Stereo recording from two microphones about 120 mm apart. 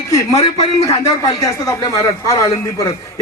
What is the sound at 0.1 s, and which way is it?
A man's voice, 30° left (ahead or behind).